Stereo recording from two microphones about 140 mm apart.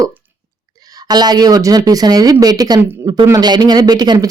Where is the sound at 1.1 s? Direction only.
30° right (ahead or behind).